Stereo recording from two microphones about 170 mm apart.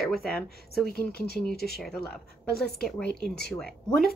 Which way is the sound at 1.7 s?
Centre (ahead or behind).